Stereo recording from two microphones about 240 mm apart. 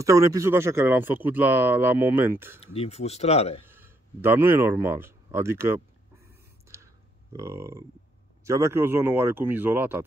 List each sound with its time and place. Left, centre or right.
0.0 s speech: centre
2.6 s speech: left
3.6 s speech: centre
6.2 s a sound: centre
7.3 s speech: centre